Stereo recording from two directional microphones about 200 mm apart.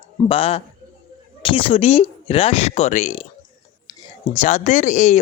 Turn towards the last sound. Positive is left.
turn(degrees=35)  # may be behind; listen again after turning